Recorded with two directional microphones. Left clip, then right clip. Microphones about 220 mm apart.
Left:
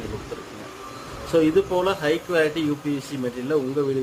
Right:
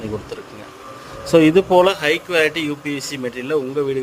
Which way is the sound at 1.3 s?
30° right (ahead or behind).